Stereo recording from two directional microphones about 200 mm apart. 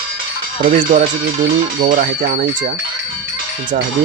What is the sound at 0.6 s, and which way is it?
Speech, 40° right (ahead or behind).